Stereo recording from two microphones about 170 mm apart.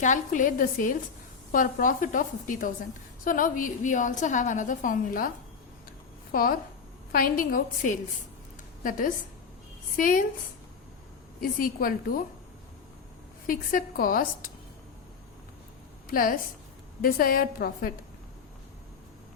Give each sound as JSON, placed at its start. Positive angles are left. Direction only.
{"t": 0.0, "sound": "a woman's voice", "side_deg": 50}
{"t": 6.3, "sound": "a woman's voice", "side_deg": 60}
{"t": 11.3, "sound": "a woman's voice", "side_deg": 55}
{"t": 13.5, "sound": "a woman's voice", "side_deg": 55}
{"t": 16.0, "sound": "a woman's voice", "side_deg": 55}